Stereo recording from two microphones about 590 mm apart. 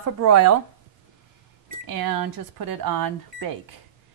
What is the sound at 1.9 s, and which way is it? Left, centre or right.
Speech, right.